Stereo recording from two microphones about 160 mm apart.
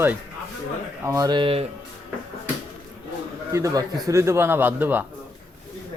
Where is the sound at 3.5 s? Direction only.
20° right (ahead or behind).